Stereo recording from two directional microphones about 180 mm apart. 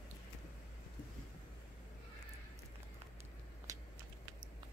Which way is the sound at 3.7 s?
20° right (ahead or behind).